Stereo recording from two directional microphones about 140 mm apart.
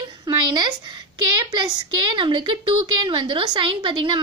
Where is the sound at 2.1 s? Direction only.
35° right (ahead or behind).